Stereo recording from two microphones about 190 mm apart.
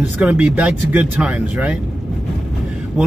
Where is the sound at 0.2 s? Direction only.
5° right (ahead or behind).